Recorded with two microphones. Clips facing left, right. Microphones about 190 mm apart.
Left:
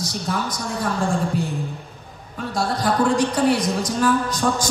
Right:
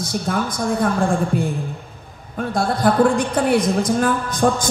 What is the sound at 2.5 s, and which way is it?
A woman's voice, 55° right (ahead or behind).